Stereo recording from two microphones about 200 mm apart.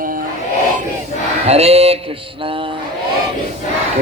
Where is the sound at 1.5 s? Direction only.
30° right (ahead or behind).